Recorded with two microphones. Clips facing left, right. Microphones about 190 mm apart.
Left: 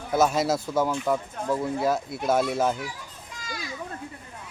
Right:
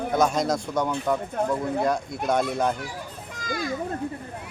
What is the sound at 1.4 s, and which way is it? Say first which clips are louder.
Speech: right 4 dB; 60° right (ahead or behind).